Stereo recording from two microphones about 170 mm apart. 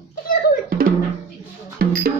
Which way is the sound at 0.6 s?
55° right (ahead or behind).